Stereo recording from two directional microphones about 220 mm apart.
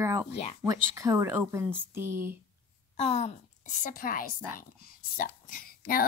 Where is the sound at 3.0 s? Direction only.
30° left (ahead or behind).